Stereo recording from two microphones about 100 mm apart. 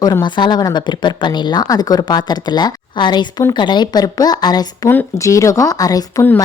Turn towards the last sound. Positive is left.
turn(degrees=35)  # may be behind; listen again after turning